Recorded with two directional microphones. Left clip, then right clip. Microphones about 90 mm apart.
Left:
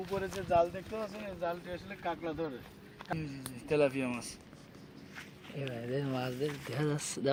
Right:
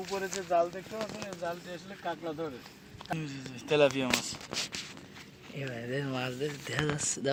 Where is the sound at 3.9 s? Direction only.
90° right.